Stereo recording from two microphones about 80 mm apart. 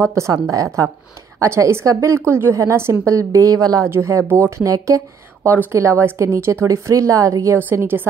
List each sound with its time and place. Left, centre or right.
0.0 s a woman's voice: right
1.4 s a woman's voice: right
3.8 s a woman's voice: right
5.5 s a woman's voice: right
7.7 s a woman's voice: right